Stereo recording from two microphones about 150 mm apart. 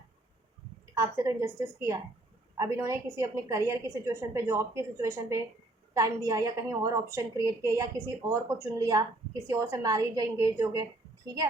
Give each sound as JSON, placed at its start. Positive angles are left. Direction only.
{"t": 1.0, "sound": "a woman's voice", "side_deg": -20}